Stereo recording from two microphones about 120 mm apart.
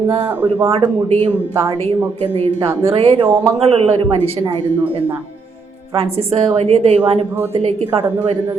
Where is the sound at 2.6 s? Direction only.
50° right (ahead or behind).